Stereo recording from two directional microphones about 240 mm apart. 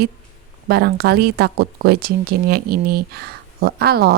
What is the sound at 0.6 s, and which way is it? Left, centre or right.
A woman's voice, right.